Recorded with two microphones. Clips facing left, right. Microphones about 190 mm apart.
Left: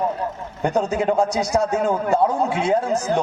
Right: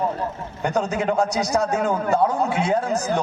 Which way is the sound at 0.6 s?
30° left (ahead or behind).